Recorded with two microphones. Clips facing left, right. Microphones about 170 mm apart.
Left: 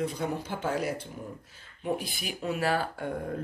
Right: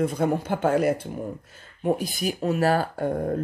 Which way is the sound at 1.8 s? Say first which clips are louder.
Right 8 dB; 45° right (ahead or behind).